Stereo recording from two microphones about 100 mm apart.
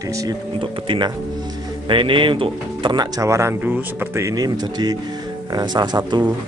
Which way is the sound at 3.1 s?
30° right (ahead or behind).